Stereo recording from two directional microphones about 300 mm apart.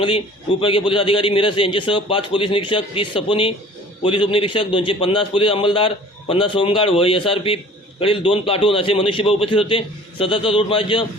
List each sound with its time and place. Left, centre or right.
0.6 s a man's voice: centre